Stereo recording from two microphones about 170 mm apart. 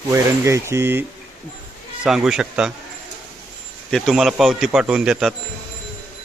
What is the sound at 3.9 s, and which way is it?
Speech, centre (ahead or behind).